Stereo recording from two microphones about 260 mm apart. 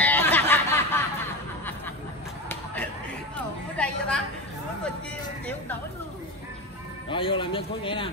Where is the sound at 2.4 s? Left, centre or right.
Centre.